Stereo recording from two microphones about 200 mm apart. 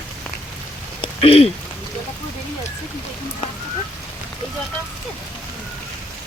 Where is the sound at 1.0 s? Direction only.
30° left (ahead or behind).